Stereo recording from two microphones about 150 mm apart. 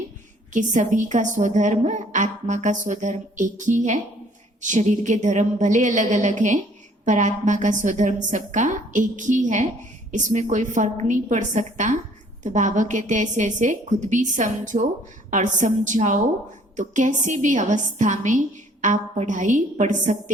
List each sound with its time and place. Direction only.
0.5 s a woman's voice: 55° right (ahead or behind)